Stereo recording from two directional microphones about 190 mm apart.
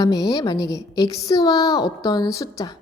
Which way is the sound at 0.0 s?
20° left (ahead or behind).